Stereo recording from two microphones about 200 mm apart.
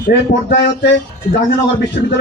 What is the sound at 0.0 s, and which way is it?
Speech, 55° left (ahead or behind).